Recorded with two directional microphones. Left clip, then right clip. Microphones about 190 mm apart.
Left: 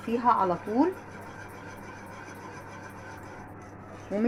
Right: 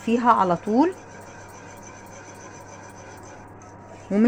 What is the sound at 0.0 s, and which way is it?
Speech, 65° right (ahead or behind).